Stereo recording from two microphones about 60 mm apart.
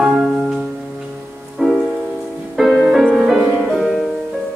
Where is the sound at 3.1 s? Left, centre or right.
Centre.